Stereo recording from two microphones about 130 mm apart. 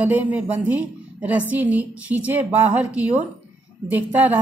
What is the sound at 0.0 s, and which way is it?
A woman's voice, 15° right (ahead or behind).